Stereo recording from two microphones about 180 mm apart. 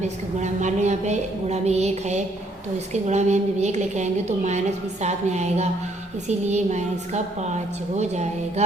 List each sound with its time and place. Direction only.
0.0 s a woman's voice: 40° right (ahead or behind)